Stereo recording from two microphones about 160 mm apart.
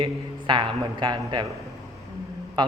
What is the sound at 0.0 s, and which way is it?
A man's voice, 30° right (ahead or behind).